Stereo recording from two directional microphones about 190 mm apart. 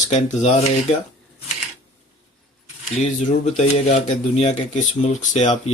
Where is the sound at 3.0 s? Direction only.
40° left (ahead or behind).